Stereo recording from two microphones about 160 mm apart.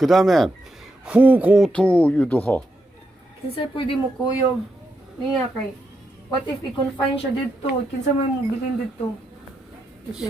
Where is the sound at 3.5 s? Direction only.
35° left (ahead or behind).